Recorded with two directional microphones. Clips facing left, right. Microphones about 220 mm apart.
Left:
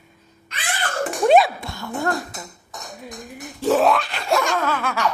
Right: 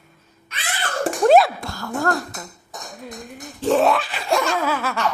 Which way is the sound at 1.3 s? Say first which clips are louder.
Right 1 dB; centre (ahead or behind).